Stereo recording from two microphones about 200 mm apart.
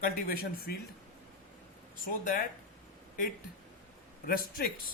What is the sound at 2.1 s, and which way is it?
Speech, 45° left (ahead or behind).